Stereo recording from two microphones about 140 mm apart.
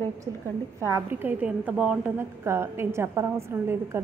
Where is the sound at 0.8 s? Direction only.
15° right (ahead or behind).